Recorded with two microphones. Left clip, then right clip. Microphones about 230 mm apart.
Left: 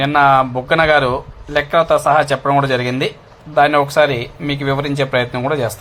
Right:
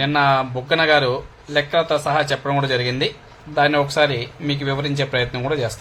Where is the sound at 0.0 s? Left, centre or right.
Centre.